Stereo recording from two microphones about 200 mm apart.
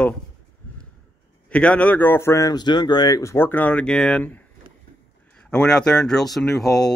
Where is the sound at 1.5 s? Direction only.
5° left (ahead or behind).